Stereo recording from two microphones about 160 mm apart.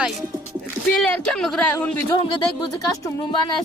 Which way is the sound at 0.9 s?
5° left (ahead or behind).